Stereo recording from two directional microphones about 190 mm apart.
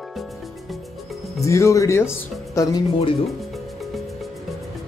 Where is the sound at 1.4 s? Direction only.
15° left (ahead or behind).